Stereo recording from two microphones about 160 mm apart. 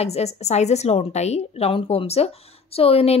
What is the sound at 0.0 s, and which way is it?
A woman's voice, 40° left (ahead or behind).